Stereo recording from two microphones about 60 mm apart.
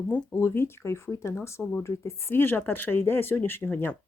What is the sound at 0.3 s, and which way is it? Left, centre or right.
Speech, left.